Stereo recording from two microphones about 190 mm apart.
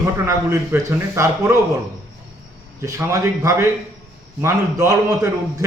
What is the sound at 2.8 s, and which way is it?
Speech, 15° right (ahead or behind).